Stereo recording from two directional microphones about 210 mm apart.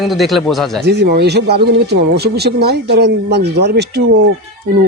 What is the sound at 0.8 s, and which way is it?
A man's voice, 55° right (ahead or behind).